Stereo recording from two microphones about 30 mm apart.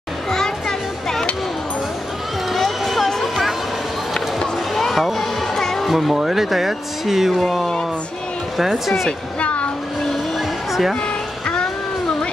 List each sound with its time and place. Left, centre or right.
0.3 s music: centre
2.5 s a sound: centre
4.1 s music: centre
4.8 s a sound: centre
5.5 s music: centre
5.9 s speech: centre
8.5 s speech: centre
9.4 s a sound: left
10.7 s music: centre